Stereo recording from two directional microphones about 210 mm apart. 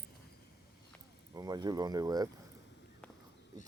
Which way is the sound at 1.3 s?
20° right (ahead or behind).